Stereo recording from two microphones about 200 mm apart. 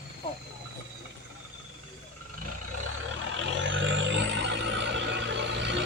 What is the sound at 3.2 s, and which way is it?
Vehicle, 70° right (ahead or behind).